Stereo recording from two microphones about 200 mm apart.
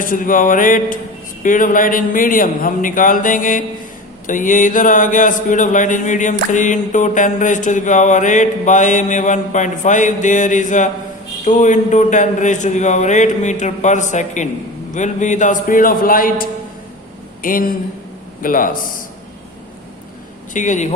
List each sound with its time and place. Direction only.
0.0 s a man's voice: 40° left (ahead or behind)
20.5 s speech: 40° left (ahead or behind)